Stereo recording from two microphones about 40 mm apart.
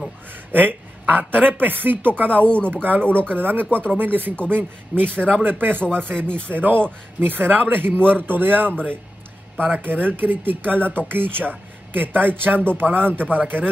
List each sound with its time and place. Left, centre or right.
0.5 s speech: right
2.4 s speech: left
2.7 s speech: right